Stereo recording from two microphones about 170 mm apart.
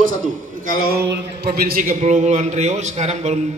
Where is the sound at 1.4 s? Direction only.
60° right (ahead or behind).